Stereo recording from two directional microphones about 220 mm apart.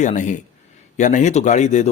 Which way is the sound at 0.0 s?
35° left (ahead or behind).